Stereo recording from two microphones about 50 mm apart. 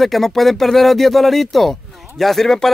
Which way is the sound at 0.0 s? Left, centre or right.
Centre.